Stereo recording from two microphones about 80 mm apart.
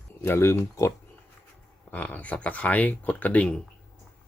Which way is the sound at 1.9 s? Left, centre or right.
Left.